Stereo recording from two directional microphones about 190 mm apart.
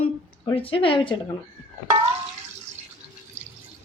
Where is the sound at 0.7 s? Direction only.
30° left (ahead or behind).